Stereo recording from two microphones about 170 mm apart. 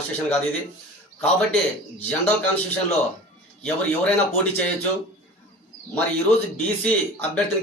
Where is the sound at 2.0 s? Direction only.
10° left (ahead or behind).